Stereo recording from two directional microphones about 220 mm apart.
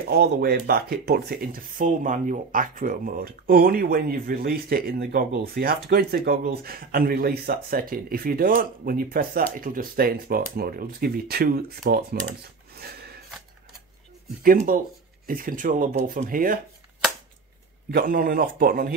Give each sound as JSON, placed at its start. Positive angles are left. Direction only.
{"t": 0.1, "sound": "speech", "side_deg": -45}
{"t": 12.7, "sound": "a sound", "side_deg": -45}
{"t": 14.4, "sound": "speech", "side_deg": -40}
{"t": 17.9, "sound": "speech", "side_deg": -40}